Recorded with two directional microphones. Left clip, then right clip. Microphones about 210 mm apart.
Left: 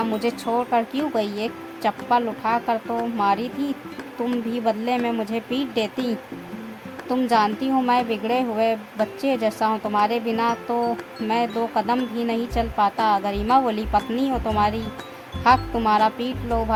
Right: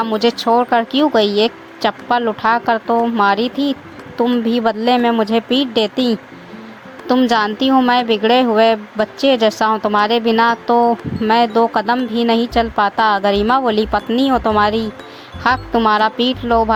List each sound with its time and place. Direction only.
0.0 s speech: 25° right (ahead or behind)
7.3 s speech: 25° right (ahead or behind)